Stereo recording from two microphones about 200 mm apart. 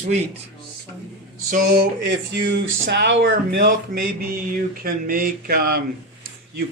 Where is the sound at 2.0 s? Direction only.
60° right (ahead or behind).